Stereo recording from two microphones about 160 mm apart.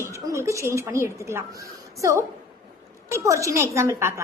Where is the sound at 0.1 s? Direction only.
20° right (ahead or behind).